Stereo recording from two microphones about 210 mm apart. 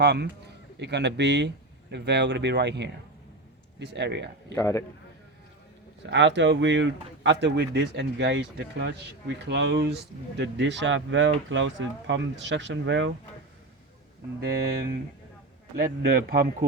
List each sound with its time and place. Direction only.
0.0 s speech: 55° right (ahead or behind)
4.5 s a man's voice: 15° left (ahead or behind)
6.1 s speech: 60° right (ahead or behind)
15.8 s speech: 50° right (ahead or behind)